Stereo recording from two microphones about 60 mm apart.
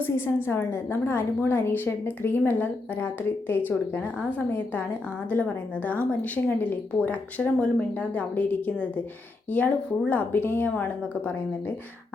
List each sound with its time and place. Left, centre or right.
0.0 s a woman's voice: left